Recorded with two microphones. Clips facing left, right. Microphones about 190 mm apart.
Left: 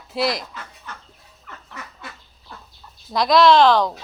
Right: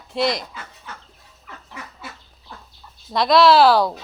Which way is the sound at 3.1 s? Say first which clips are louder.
Even; centre (ahead or behind).